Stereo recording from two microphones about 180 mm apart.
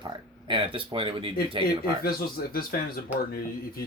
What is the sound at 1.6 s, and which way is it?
Speech, 55° left (ahead or behind).